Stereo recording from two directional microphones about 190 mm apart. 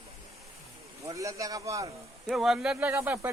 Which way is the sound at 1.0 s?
15° right (ahead or behind).